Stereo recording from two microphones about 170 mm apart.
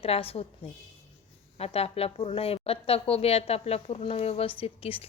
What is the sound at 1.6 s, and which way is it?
A woman's voice, 35° left (ahead or behind).